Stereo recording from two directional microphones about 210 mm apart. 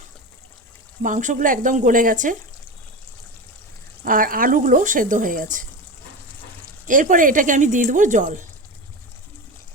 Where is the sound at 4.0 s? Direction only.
40° right (ahead or behind).